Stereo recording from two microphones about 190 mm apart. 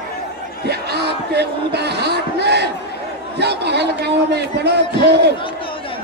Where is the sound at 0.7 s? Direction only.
60° right (ahead or behind).